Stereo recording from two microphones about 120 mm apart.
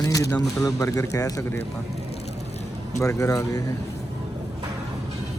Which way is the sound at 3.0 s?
25° left (ahead or behind).